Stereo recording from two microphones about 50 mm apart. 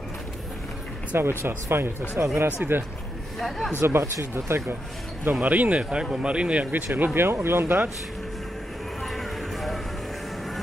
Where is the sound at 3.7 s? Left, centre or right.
Right.